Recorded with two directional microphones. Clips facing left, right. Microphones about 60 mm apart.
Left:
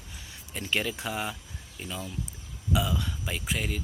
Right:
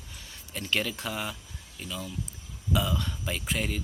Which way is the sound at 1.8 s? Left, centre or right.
Left.